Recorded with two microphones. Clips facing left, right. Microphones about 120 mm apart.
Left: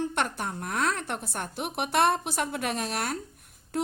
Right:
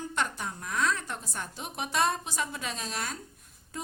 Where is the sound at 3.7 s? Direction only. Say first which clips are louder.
Left 10 dB; 75° left (ahead or behind).